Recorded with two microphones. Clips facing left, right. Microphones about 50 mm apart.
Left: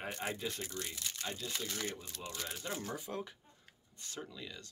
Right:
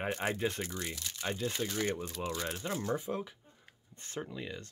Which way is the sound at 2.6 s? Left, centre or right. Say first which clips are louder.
Right 7 dB; centre.